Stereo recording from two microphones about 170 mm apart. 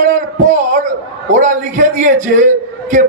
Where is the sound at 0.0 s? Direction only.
45° right (ahead or behind).